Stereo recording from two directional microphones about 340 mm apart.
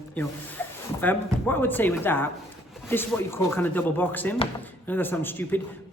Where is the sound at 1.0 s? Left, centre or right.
Centre.